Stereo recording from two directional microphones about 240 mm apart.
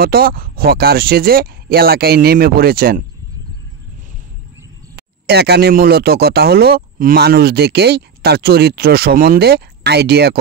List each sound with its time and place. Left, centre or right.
0.0 s speech: right
4.9 s speech: right